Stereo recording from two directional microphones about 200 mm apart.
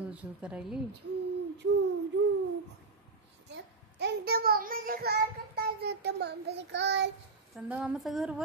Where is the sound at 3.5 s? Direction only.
55° right (ahead or behind).